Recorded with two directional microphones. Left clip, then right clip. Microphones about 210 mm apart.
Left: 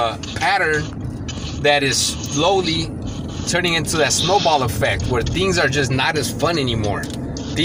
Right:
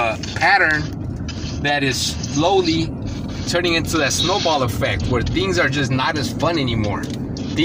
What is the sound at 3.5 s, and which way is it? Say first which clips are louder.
Speech: even; 5° left (ahead or behind).